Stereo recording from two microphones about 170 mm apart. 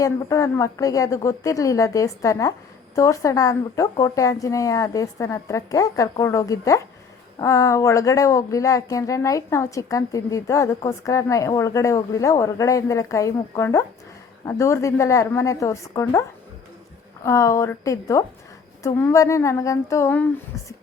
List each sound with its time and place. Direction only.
0.0 s a woman's voice: 20° left (ahead or behind)
17.2 s a woman's voice: 20° left (ahead or behind)